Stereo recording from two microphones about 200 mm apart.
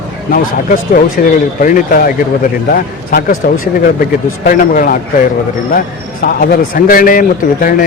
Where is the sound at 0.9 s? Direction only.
45° left (ahead or behind).